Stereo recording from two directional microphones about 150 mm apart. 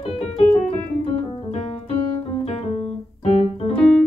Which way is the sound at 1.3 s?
40° left (ahead or behind).